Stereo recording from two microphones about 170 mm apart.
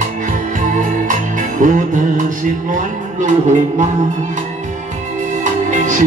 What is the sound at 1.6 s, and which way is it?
Music, 50° right (ahead or behind).